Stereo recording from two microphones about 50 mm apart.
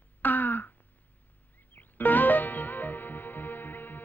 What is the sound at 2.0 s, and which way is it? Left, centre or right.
Music, left.